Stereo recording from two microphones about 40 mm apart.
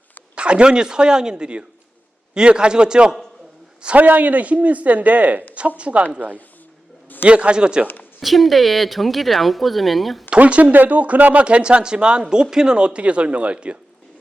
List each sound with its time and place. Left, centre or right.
0.3 s speech: right
3.9 s speech: right
7.3 s speech: right
8.2 s speech: centre
10.2 s speech: right
11.4 s speech: right